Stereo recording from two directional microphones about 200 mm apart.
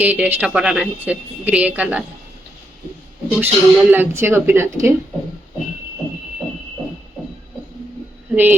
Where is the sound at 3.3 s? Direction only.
10° right (ahead or behind).